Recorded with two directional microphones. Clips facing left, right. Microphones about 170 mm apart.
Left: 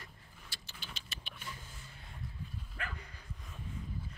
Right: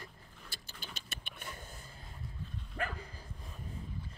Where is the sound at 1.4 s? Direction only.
55° right (ahead or behind); by 2.1 s 40° right (ahead or behind).